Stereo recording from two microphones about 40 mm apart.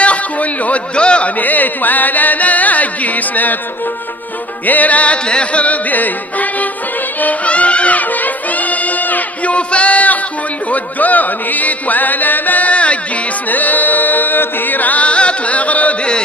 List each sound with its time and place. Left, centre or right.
0.0 s speech: left
1.4 s music: left
4.6 s music: left
13.5 s music: left